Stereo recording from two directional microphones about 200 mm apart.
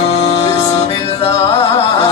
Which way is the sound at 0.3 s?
25° left (ahead or behind).